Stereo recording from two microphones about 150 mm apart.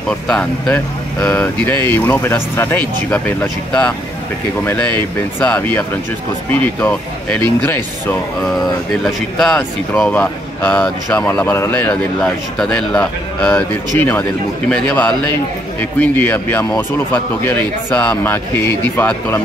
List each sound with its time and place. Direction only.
0.1 s speech: 5° left (ahead or behind)
5.4 s speech: 10° left (ahead or behind)